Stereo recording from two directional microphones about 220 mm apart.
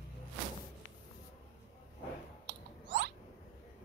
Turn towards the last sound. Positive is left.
turn(degrees=-55)  # may be behind; listen again after turning